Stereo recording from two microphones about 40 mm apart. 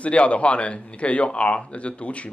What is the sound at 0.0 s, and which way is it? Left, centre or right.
Speech, left.